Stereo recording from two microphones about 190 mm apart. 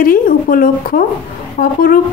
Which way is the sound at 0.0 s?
50° left (ahead or behind).